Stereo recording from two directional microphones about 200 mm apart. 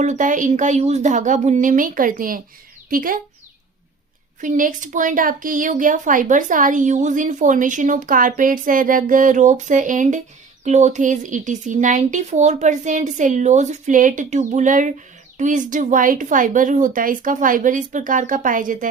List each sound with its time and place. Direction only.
0.0 s a woman's voice: 40° right (ahead or behind)
4.4 s a woman's voice: 40° right (ahead or behind)